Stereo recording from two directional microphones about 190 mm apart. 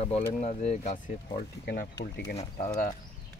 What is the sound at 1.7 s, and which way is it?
Speech, 55° left (ahead or behind).